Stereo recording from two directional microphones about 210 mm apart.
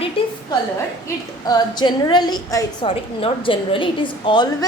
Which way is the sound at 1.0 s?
20° left (ahead or behind).